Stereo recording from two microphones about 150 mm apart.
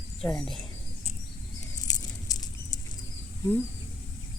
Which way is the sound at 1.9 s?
25° left (ahead or behind).